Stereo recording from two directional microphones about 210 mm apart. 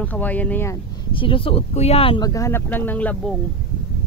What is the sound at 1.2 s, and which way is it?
Speech, 25° left (ahead or behind).